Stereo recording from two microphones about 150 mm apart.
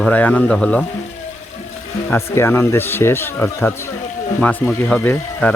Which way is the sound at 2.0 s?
15° left (ahead or behind).